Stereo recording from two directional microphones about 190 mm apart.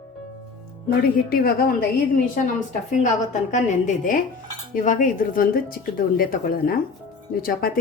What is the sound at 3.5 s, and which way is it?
A woman's voice, 40° left (ahead or behind).